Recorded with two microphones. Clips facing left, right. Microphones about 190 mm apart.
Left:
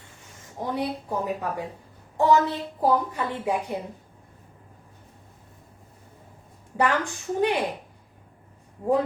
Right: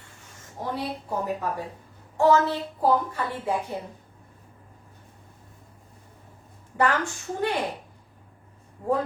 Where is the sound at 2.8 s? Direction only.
15° left (ahead or behind).